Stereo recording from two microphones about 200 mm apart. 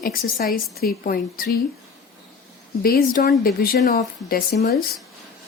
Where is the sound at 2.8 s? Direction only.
50° left (ahead or behind).